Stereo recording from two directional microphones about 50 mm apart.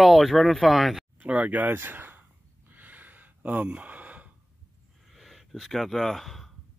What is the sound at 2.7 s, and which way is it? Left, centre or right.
Gasp, right.